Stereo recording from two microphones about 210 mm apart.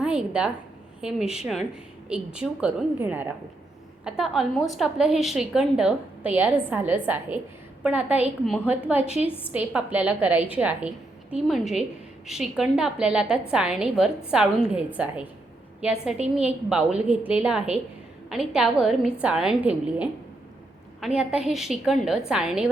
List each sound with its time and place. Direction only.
0.0 s a woman's voice: 5° right (ahead or behind)
9.0 s a woman's voice: 30° left (ahead or behind)
9.5 s a woman's voice: 5° right (ahead or behind)
21.2 s a woman's voice: 5° right (ahead or behind)